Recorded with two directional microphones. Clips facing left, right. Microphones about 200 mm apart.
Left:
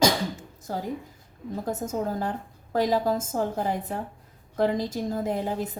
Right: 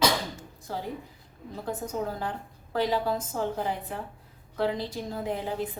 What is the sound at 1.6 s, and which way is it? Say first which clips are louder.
A woman's voice: left 2 dB; 40° left (ahead or behind).